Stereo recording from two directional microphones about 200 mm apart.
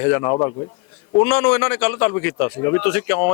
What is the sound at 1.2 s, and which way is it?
Speech, 5° left (ahead or behind).